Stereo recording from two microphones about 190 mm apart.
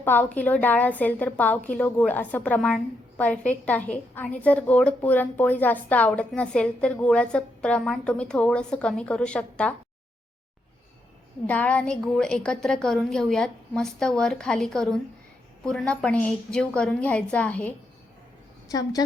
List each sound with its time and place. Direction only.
0.0 s a woman's voice: 10° left (ahead or behind)
11.4 s a woman's voice: 5° left (ahead or behind)
18.7 s a woman's voice: 20° left (ahead or behind)